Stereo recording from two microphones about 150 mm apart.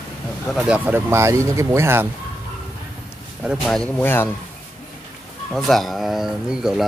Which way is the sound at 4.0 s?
15° left (ahead or behind).